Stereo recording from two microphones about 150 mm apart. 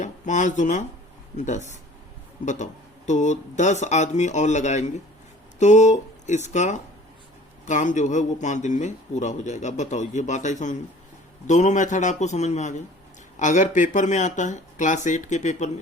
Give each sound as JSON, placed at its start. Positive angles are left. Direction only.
{"t": 0.0, "sound": "a man's voice", "side_deg": 55}